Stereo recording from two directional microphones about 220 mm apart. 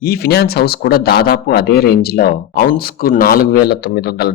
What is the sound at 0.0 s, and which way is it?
A man's voice, 45° left (ahead or behind).